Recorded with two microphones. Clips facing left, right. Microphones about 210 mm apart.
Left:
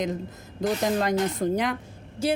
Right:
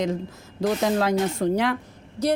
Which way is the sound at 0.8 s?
Centre (ahead or behind).